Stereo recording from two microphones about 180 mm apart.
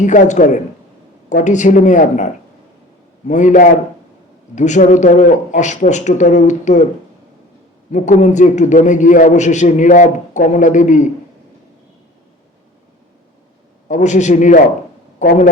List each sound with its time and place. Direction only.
0.0 s a man's voice: 45° left (ahead or behind)
3.2 s a man's voice: 45° left (ahead or behind)
7.9 s a man's voice: 40° left (ahead or behind)
13.8 s a man's voice: 45° left (ahead or behind)